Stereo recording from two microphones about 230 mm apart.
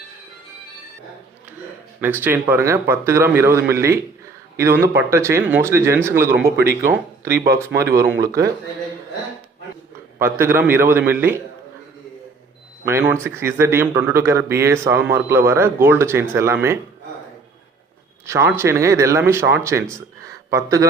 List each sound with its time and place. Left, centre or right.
2.0 s speech: centre
6.6 s speech: right
7.3 s speech: centre
10.2 s speech: centre
12.8 s speech: centre
18.3 s speech: centre